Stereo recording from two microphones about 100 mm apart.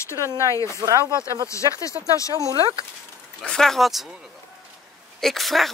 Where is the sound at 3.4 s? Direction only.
5° left (ahead or behind).